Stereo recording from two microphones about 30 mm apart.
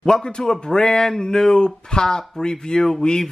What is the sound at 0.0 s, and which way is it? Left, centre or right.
Speech, left.